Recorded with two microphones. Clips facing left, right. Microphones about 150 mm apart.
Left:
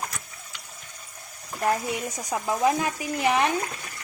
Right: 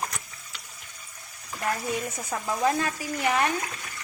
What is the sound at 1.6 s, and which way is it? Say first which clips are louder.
Speech: left 3 dB; 20° left (ahead or behind).